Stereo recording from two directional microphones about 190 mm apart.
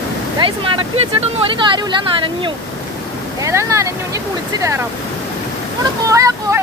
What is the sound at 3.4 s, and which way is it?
Speech, 15° right (ahead or behind).